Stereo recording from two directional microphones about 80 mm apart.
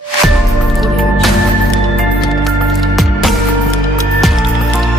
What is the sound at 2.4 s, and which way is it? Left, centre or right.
Music, centre.